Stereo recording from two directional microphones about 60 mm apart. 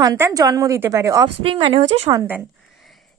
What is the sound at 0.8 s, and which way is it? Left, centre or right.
Speech, right.